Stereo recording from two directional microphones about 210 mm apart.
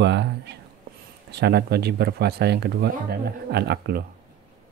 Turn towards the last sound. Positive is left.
turn(degrees=-50)  # may be behind; listen again after turning